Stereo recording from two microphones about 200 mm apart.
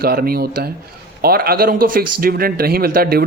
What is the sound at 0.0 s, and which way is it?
Speech, 50° right (ahead or behind).